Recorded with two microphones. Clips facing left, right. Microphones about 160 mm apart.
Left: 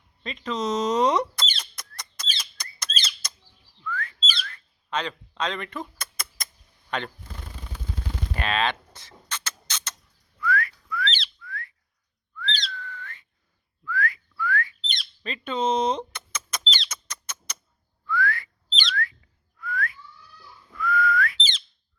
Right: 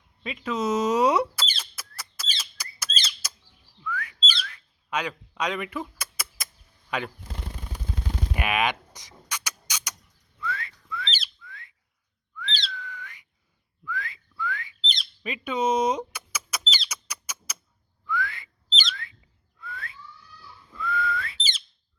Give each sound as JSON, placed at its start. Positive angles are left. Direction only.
{"t": 0.2, "sound": "squeak", "side_deg": -5}
{"t": 3.2, "sound": "bird", "side_deg": -10}
{"t": 3.8, "sound": "whistling", "side_deg": -10}
{"t": 4.2, "sound": "whistling", "side_deg": 5}
{"t": 4.5, "sound": "speech", "side_deg": -10}
{"t": 6.0, "sound": "bird", "side_deg": -5}
{"t": 6.9, "sound": "speech", "side_deg": -10}
{"t": 8.3, "sound": "rodents", "side_deg": -15}
{"t": 10.4, "sound": "whistling", "side_deg": -25}
{"t": 12.5, "sound": "whistling", "side_deg": -5}
{"t": 15.2, "sound": "a sound", "side_deg": -10}
{"t": 18.0, "sound": "whistling", "side_deg": -20}
{"t": 18.7, "sound": "bird", "side_deg": 0}
{"t": 19.5, "sound": "whistling", "side_deg": -25}